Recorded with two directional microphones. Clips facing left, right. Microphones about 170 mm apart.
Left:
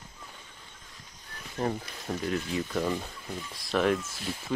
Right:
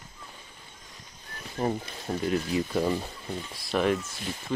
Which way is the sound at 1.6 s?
15° right (ahead or behind).